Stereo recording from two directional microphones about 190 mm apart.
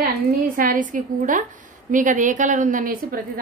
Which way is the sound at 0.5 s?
45° right (ahead or behind).